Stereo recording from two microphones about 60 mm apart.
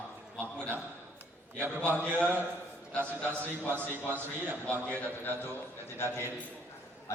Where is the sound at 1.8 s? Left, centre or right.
Left.